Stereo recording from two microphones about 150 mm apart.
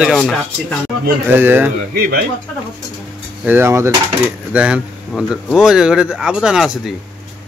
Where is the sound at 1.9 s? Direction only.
90° right.